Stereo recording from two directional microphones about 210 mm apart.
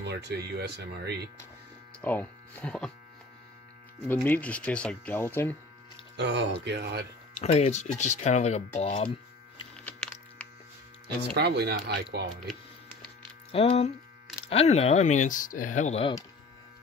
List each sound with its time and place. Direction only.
0.0 s speech: 50° right (ahead or behind)
2.0 s speech: 10° left (ahead or behind)
4.1 s speech: 10° left (ahead or behind)
6.1 s speech: 60° right (ahead or behind)
7.4 s speech: 30° left (ahead or behind)
9.8 s a sound: 5° left (ahead or behind)
11.3 s speech: 50° right (ahead or behind)
13.5 s speech: 30° left (ahead or behind)